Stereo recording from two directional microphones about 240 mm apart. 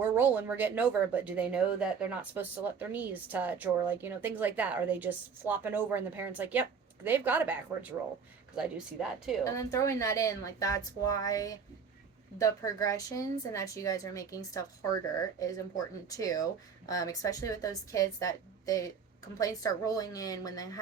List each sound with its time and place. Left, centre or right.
0.0 s speech: centre
9.4 s speech: centre